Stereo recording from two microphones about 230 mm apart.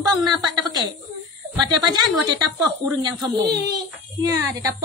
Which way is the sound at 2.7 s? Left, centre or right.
Centre.